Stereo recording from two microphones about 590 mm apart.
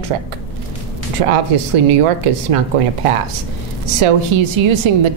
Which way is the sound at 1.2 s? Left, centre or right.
Right.